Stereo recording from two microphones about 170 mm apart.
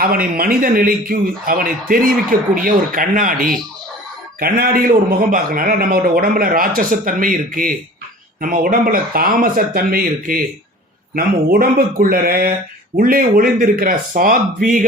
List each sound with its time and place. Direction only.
0.0 s a man's voice: 60° right (ahead or behind)